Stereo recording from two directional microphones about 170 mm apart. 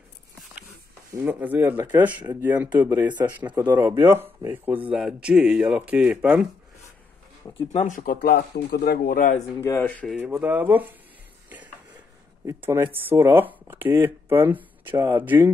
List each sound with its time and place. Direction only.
1.1 s speech: 10° right (ahead or behind)
7.7 s speech: 50° left (ahead or behind)
9.6 s speech: 15° left (ahead or behind)
10.0 s speech: 5° right (ahead or behind)
12.4 s speech: 15° right (ahead or behind)